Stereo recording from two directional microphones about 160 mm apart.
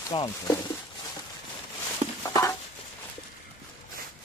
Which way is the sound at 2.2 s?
20° left (ahead or behind).